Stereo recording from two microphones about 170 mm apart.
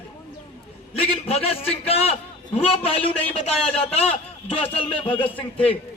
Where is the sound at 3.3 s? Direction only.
35° left (ahead or behind).